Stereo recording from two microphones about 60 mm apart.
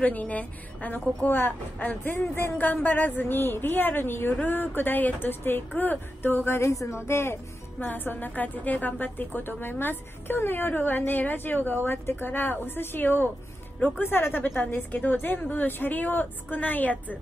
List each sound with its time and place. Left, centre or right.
0.0 s a woman's voice: left
6.7 s speech: left
7.0 s speech: left
7.8 s a woman's voice: left